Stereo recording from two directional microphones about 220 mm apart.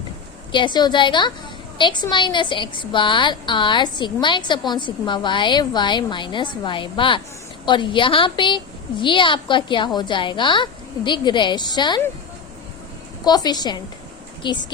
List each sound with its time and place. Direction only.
0.5 s a woman's voice: 20° left (ahead or behind)
13.2 s a woman's voice: 20° left (ahead or behind)